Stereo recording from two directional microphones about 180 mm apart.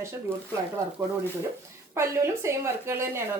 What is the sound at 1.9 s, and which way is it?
A woman's voice, 15° right (ahead or behind).